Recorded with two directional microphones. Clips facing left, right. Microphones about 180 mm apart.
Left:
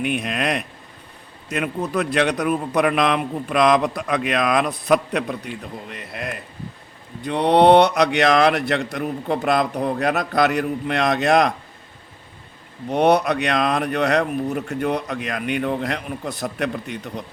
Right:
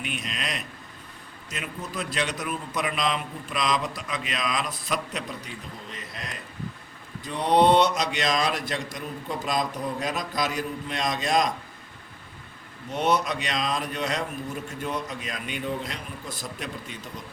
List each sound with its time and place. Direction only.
0.0 s a man's voice: 55° left (ahead or behind)
12.9 s a man's voice: 60° left (ahead or behind)